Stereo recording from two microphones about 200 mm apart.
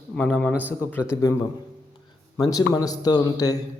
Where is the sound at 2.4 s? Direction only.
15° left (ahead or behind).